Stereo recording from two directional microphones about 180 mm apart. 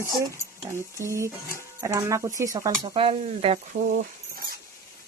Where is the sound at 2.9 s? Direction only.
35° right (ahead or behind).